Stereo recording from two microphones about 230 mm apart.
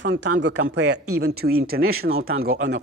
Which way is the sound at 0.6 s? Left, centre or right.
Right.